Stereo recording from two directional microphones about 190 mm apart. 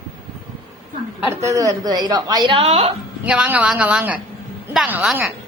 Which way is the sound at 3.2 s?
5° right (ahead or behind).